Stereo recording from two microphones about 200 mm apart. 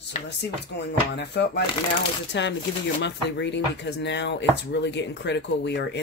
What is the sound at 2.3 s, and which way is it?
Speech, 60° left (ahead or behind).